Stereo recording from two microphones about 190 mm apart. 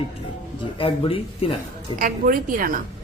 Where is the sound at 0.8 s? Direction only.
30° left (ahead or behind).